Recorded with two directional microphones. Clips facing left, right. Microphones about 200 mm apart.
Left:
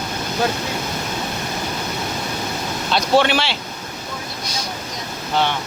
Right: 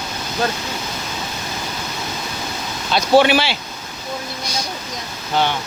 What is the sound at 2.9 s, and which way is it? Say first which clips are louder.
Speech: right 3 dB; 5° right (ahead or behind).